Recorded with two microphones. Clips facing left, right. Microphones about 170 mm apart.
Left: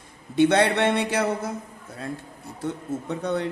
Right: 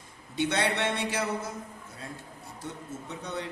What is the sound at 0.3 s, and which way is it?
Speech, 60° left (ahead or behind).